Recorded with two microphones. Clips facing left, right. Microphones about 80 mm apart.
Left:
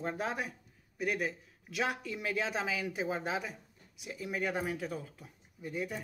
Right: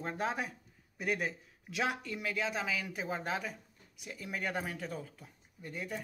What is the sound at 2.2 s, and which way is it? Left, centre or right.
Speech, left.